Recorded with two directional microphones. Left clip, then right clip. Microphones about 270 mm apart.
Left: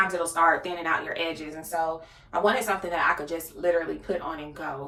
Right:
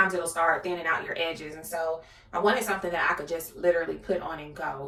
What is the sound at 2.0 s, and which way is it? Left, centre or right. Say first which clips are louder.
Speech: left 3 dB; centre.